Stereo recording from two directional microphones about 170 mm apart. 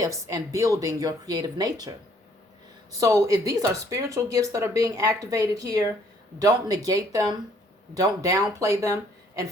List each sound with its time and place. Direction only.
0.0 s speech: 20° right (ahead or behind)
3.0 s speech: 20° right (ahead or behind)